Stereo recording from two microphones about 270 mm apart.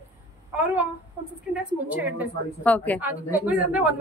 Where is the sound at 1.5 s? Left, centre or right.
Centre.